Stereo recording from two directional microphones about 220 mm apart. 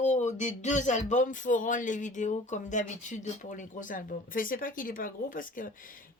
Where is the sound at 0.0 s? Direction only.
30° left (ahead or behind).